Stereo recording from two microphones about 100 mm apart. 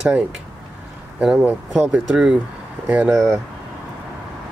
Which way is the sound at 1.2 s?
10° right (ahead or behind).